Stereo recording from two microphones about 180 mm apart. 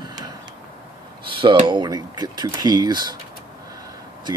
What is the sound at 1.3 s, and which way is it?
Speech, 25° right (ahead or behind).